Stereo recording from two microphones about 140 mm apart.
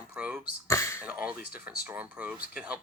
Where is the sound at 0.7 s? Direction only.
20° left (ahead or behind).